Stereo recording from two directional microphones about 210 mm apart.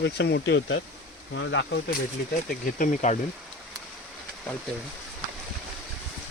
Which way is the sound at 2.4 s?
40° left (ahead or behind).